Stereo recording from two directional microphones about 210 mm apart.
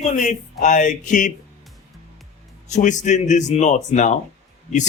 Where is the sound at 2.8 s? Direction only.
35° left (ahead or behind).